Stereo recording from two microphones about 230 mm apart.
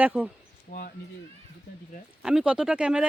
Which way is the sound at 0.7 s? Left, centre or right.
Left.